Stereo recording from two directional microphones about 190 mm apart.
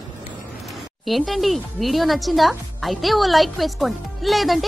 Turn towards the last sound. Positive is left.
turn(degrees=0)  # may be behind; listen again after turning